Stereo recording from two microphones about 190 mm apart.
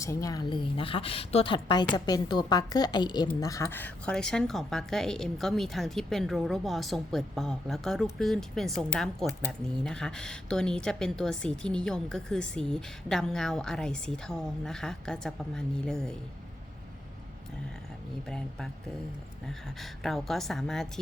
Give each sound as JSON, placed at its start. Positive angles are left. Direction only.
{"t": 0.0, "sound": "a woman's voice", "side_deg": 15}
{"t": 18.3, "sound": "a woman's voice", "side_deg": 5}
{"t": 19.8, "sound": "a woman's voice", "side_deg": 0}